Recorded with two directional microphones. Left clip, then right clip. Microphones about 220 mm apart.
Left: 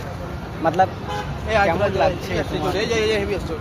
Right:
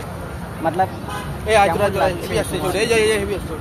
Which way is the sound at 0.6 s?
20° left (ahead or behind).